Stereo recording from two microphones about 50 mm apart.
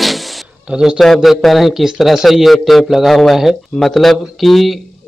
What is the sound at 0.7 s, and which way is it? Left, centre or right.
Speech, centre.